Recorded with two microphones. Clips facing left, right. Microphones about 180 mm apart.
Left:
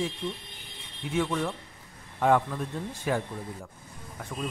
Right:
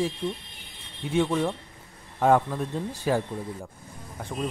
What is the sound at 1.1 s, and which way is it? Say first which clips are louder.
Speech: right 4 dB; 25° right (ahead or behind).